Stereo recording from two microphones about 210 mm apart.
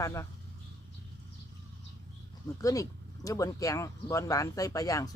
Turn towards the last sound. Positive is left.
turn(degrees=15)  # may be behind; listen again after turning